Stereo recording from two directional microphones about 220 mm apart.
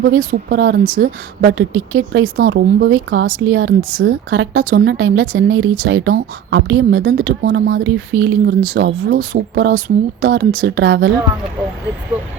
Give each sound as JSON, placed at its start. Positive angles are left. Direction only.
{"t": 0.0, "sound": "a woman's voice", "side_deg": -50}